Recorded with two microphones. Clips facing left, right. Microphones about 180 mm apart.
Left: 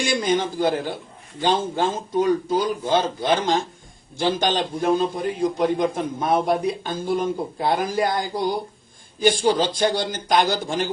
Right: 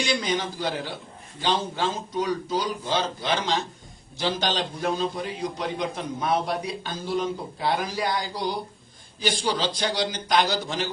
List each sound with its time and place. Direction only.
0.0 s a man's voice: 50° left (ahead or behind)